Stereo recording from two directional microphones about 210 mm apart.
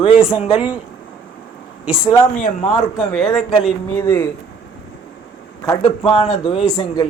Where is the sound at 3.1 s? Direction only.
5° left (ahead or behind).